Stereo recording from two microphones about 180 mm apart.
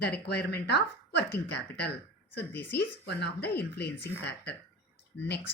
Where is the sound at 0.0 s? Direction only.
65° left (ahead or behind).